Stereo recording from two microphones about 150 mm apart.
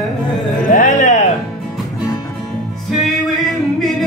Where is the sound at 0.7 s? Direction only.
60° left (ahead or behind).